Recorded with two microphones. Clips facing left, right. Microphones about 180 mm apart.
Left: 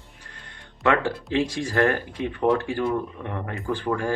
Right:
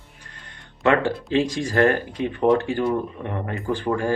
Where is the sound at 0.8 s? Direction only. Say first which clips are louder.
Right 3 dB; 20° right (ahead or behind).